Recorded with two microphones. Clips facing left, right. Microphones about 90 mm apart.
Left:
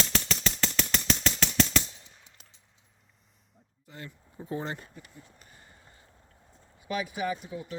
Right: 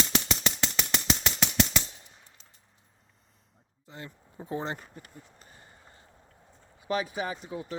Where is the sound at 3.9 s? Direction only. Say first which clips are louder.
Right 1 dB; 25° right (ahead or behind).